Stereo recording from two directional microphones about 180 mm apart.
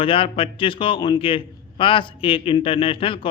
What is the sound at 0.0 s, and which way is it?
A man's voice, 30° left (ahead or behind).